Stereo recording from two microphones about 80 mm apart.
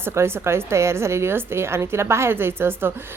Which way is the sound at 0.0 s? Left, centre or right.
Right.